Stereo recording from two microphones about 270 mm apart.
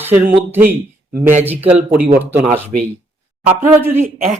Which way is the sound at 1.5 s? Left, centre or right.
Centre.